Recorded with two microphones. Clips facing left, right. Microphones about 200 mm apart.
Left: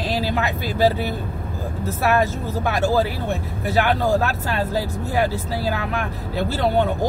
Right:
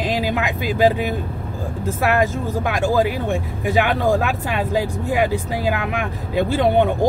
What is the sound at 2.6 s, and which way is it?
Speech, 15° right (ahead or behind).